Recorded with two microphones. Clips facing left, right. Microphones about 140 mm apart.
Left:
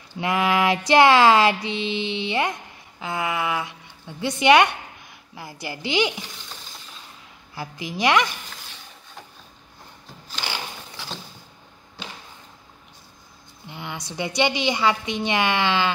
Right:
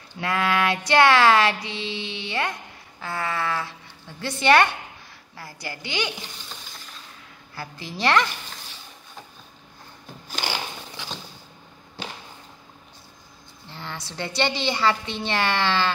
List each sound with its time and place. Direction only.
0.2 s music: 20° left (ahead or behind)
3.0 s a woman's voice: 15° left (ahead or behind)
5.3 s music: 20° left (ahead or behind)
7.5 s a woman's voice: 15° left (ahead or behind)
13.7 s a woman's voice: 15° left (ahead or behind)